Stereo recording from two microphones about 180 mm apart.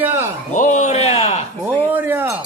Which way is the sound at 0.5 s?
45° left (ahead or behind).